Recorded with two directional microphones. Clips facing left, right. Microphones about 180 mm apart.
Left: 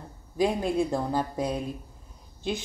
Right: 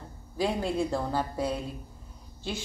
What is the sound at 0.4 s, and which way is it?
Speech, 15° left (ahead or behind).